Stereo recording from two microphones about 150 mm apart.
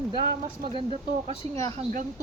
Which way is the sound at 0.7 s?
40° right (ahead or behind).